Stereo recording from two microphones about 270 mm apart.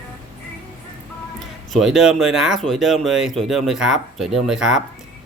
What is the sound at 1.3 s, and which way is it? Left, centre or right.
Speech, centre.